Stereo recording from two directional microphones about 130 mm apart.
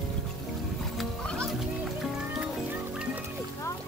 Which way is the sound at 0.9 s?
5° left (ahead or behind).